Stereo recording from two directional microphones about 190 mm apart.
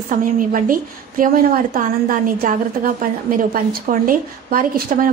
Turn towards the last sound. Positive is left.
turn(degrees=-50)  # may be behind; listen again after turning